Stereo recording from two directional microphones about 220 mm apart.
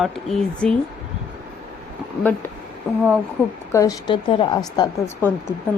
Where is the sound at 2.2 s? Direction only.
10° left (ahead or behind).